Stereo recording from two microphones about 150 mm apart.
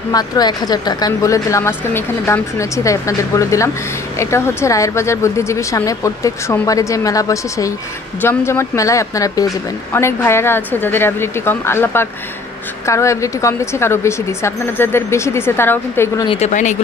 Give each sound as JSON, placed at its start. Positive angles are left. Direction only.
{"t": 0.1, "sound": "a woman's voice", "side_deg": 25}
{"t": 16.3, "sound": "speech", "side_deg": 45}